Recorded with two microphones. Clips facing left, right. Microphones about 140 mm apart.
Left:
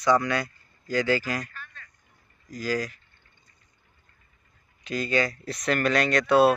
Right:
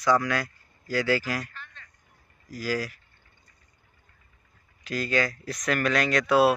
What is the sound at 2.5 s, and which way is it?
Speech, 5° right (ahead or behind).